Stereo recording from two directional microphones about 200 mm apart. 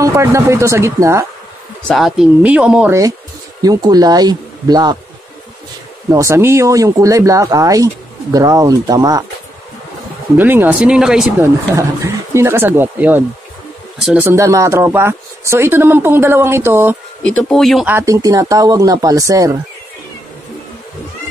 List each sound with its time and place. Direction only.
0.0 s speech: 15° right (ahead or behind)
1.9 s speech: centre (ahead or behind)
3.6 s speech: 20° right (ahead or behind)
6.0 s speech: 15° right (ahead or behind)
10.3 s speech: 10° right (ahead or behind)
11.4 s speech: 15° right (ahead or behind)
17.2 s speech: 5° left (ahead or behind)
17.9 s speech: 15° right (ahead or behind)